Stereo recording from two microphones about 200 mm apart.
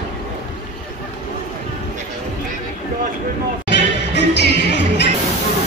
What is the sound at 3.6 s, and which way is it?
Music, 60° left (ahead or behind).